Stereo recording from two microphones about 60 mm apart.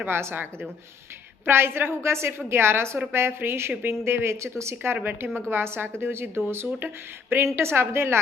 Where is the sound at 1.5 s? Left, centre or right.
Right.